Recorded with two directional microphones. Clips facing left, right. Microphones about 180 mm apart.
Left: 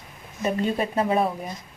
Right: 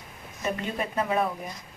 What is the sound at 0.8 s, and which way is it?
Speech, 30° left (ahead or behind).